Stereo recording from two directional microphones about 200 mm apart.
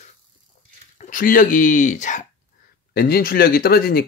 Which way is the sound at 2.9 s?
50° left (ahead or behind).